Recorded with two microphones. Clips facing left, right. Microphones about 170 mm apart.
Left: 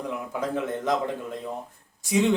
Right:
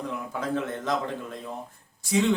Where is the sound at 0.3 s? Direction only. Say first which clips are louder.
Left 1 dB; 15° left (ahead or behind).